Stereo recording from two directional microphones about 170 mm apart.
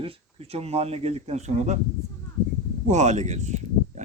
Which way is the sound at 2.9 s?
45° right (ahead or behind).